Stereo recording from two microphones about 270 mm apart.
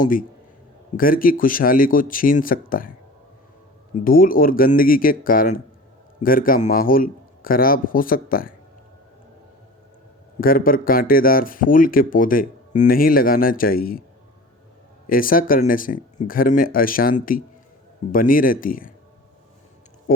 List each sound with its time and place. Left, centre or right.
0.0 s speech: left
4.0 s speech: left
10.4 s speech: left
15.1 s speech: left